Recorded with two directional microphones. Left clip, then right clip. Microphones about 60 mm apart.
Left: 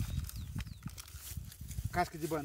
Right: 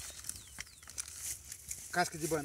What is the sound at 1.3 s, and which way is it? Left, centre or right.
Horse, right.